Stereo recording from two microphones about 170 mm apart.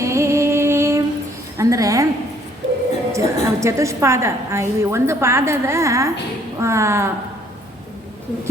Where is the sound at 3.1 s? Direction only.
15° right (ahead or behind).